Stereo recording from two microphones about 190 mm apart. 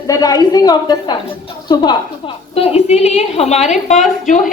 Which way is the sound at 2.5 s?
30° left (ahead or behind).